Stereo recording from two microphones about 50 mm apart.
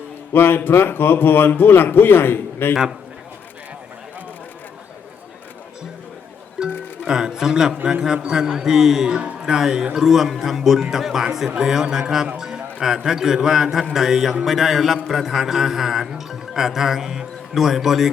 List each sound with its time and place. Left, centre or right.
0.3 s a man's voice: left
6.6 s music: centre
8.0 s a man's voice: centre
9.1 s a man's voice: right
12.4 s music: centre
12.8 s a man's voice: centre
15.0 s music: centre